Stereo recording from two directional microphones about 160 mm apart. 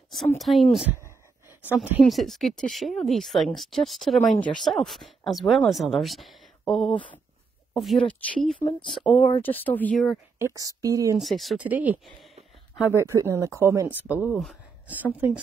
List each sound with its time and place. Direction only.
0.4 s speech: centre (ahead or behind)
2.0 s speech: centre (ahead or behind)
10.4 s speech: 20° right (ahead or behind)
11.1 s speech: centre (ahead or behind)
14.3 s speech: centre (ahead or behind)
14.9 s speech: 10° right (ahead or behind)